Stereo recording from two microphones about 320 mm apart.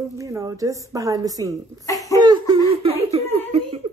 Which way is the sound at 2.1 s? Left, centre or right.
Centre.